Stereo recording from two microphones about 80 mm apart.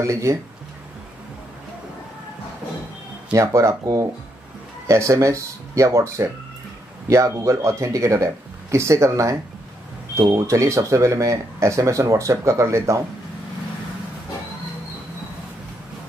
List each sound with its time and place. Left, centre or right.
0.0 s speech: right
3.3 s speech: right